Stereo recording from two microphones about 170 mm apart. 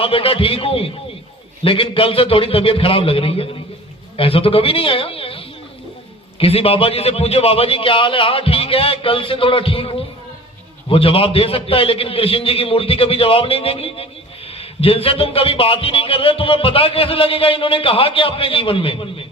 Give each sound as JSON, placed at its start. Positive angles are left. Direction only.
{"t": 0.0, "sound": "a man's voice", "side_deg": 35}